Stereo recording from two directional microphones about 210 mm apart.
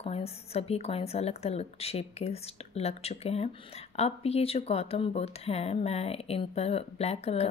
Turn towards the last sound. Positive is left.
turn(degrees=30)  # may be behind; listen again after turning